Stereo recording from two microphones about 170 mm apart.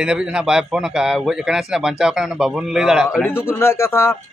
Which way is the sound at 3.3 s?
15° left (ahead or behind).